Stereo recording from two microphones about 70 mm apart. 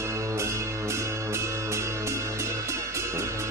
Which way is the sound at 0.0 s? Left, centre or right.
Right.